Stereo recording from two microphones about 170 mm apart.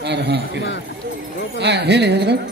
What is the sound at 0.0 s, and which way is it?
Speech, 85° right.